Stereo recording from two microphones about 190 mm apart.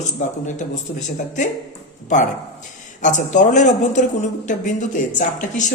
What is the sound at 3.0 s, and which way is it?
Speech, 40° left (ahead or behind).